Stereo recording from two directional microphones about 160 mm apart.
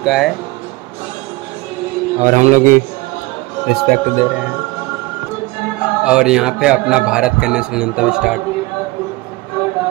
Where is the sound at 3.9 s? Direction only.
65° right (ahead or behind).